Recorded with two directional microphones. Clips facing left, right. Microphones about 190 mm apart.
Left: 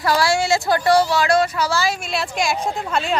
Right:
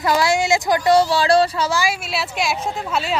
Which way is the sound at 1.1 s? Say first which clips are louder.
Right 2 dB; 30° right (ahead or behind).